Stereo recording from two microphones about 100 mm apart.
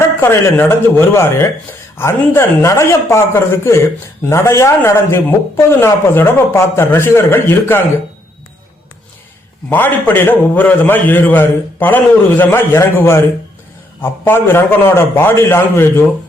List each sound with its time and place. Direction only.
0.0 s a man's voice: 25° left (ahead or behind)
9.6 s a man's voice: 20° left (ahead or behind)